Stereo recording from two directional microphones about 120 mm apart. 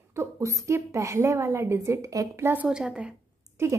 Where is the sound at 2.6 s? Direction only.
5° right (ahead or behind).